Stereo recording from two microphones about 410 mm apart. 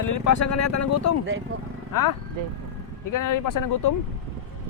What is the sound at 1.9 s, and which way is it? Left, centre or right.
Speech, left.